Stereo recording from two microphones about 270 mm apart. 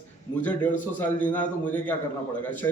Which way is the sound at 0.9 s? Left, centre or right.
Centre.